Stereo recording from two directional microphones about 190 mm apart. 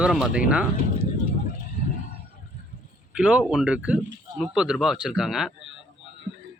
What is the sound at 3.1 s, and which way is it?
Speech, 5° right (ahead or behind).